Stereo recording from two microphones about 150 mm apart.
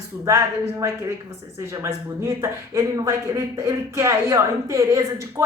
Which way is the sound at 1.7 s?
15° right (ahead or behind).